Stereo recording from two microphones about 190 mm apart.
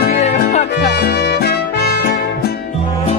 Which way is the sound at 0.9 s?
60° left (ahead or behind).